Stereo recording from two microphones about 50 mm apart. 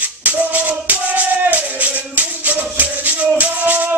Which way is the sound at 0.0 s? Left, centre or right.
Right.